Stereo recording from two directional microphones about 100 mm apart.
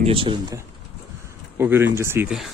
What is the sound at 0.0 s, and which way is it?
Speech, 65° right (ahead or behind).